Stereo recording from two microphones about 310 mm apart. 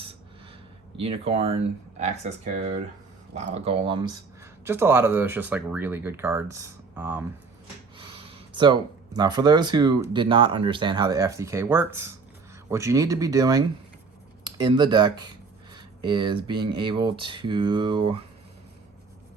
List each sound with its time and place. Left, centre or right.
0.9 s speech: centre